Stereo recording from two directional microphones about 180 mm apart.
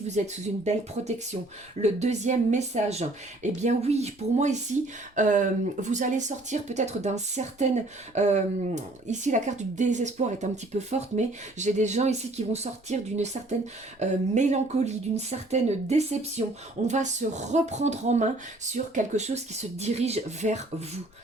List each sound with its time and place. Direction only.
0.1 s speech: 40° right (ahead or behind)